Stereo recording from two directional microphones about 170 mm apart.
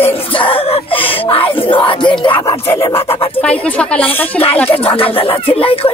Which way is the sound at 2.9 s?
35° left (ahead or behind).